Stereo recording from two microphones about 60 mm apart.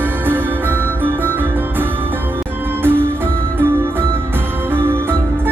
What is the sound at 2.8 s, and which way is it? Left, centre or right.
Music, right.